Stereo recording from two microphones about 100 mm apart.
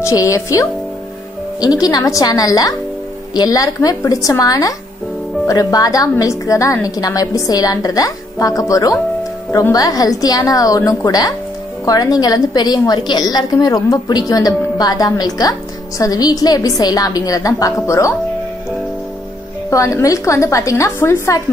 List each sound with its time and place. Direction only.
0.0 s a woman's voice: 35° left (ahead or behind)
19.7 s a woman's voice: 30° left (ahead or behind)